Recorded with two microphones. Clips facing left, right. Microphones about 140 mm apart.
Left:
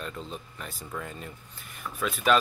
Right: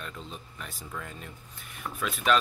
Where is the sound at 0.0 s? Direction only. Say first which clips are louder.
Left 4 dB; centre (ahead or behind).